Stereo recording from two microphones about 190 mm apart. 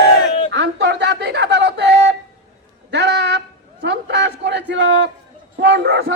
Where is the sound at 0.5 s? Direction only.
65° right (ahead or behind).